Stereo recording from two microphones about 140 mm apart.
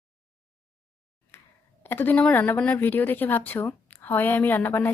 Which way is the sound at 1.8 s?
15° left (ahead or behind).